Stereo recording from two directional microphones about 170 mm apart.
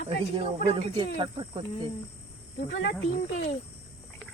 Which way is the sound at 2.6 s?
90° left.